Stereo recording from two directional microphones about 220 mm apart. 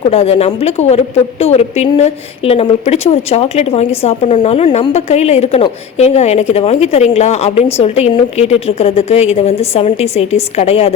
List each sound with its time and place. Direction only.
0.0 s a woman's voice: 25° left (ahead or behind)